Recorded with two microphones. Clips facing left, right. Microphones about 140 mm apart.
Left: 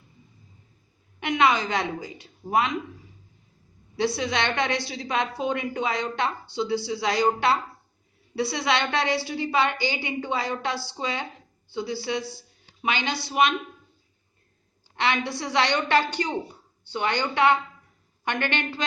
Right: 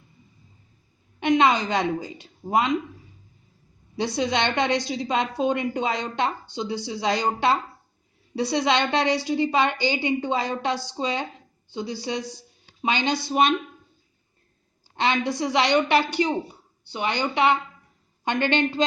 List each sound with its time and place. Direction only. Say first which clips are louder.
1.2 s a woman's voice: right 3 dB; 25° right (ahead or behind)
3.9 s a woman's voice: right 1 dB; 20° right (ahead or behind)
14.9 s a woman's voice: right 3 dB; 25° right (ahead or behind)